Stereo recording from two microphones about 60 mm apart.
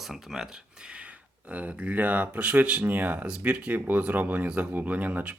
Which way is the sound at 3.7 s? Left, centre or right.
Right.